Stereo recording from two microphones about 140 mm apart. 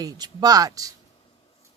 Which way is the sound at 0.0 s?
25° right (ahead or behind).